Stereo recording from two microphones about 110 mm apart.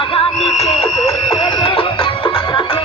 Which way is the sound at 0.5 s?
70° left (ahead or behind).